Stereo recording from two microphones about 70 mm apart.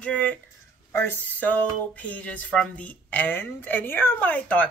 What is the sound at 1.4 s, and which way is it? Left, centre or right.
A woman's voice, left.